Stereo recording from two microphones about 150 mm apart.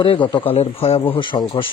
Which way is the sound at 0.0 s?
35° left (ahead or behind).